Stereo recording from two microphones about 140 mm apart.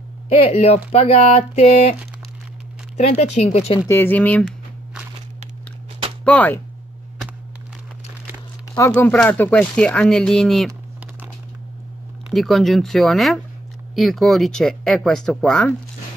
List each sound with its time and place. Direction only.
0.3 s speech: 45° left (ahead or behind)
3.2 s speech: 50° left (ahead or behind)
3.8 s speech: 15° left (ahead or behind)
6.2 s speech: 10° left (ahead or behind)
8.7 s speech: 20° left (ahead or behind); by 10.7 s centre (ahead or behind)
12.3 s speech: centre (ahead or behind)